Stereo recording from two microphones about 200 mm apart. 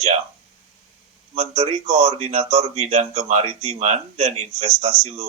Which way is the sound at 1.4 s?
30° right (ahead or behind).